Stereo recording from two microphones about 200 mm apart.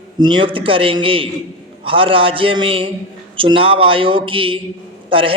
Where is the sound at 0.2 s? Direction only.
25° right (ahead or behind).